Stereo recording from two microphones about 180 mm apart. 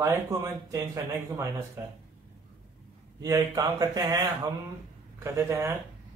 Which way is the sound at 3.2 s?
20° right (ahead or behind).